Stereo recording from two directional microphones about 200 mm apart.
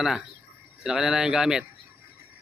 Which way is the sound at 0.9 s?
5° right (ahead or behind).